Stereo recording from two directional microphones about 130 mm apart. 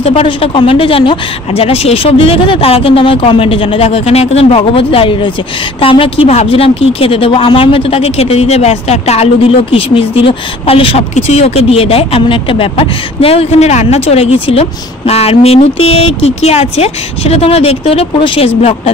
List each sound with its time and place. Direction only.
0.0 s a woman's voice: 45° left (ahead or behind)